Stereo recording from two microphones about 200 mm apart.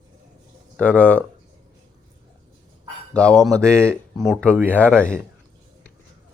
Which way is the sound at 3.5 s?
15° right (ahead or behind).